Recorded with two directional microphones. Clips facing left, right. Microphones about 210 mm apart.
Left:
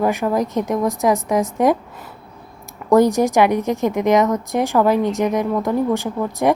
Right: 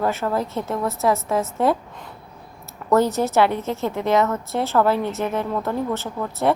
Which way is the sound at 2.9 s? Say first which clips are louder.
Left 5 dB; 15° left (ahead or behind).